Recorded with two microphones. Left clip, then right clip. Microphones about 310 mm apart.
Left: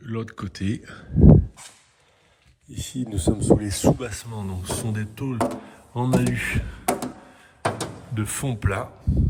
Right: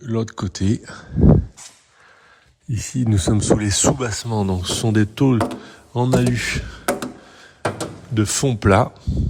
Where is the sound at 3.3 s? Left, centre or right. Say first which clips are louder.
Right 1 dB; left.